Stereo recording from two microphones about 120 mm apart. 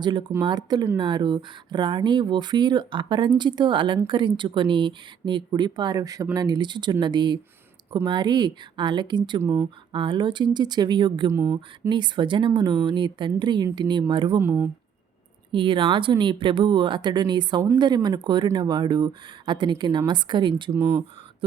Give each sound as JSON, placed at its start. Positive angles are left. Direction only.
{"t": 0.0, "sound": "speech", "side_deg": -40}
{"t": 9.4, "sound": "speech", "side_deg": -20}
{"t": 9.9, "sound": "speech", "side_deg": -40}
{"t": 11.3, "sound": "speech", "side_deg": -20}
{"t": 11.9, "sound": "speech", "side_deg": -40}
{"t": 14.3, "sound": "speech", "side_deg": -20}
{"t": 15.5, "sound": "speech", "side_deg": -45}
{"t": 20.7, "sound": "speech", "side_deg": -25}